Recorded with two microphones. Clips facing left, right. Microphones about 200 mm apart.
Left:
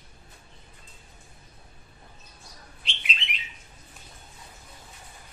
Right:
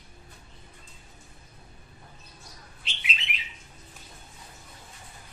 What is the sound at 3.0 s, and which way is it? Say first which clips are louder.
Bird: even; 5° right (ahead or behind).